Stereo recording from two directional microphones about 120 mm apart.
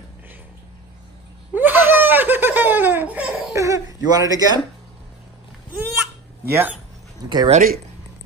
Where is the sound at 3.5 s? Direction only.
25° right (ahead or behind).